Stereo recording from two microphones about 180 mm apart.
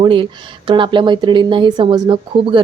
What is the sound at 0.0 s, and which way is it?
Speech, 30° right (ahead or behind).